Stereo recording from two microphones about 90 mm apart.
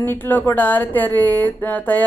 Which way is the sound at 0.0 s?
25° left (ahead or behind).